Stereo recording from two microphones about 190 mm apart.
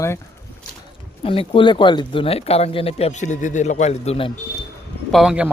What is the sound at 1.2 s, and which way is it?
Speech, 30° left (ahead or behind).